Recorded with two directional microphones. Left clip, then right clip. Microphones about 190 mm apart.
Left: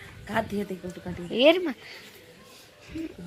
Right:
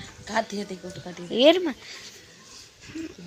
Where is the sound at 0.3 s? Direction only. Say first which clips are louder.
Right 1 dB; 55° left (ahead or behind).